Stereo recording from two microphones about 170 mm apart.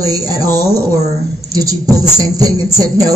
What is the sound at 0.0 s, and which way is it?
Speech, 20° right (ahead or behind).